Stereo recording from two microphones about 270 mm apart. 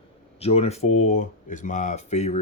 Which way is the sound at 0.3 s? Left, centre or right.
Left.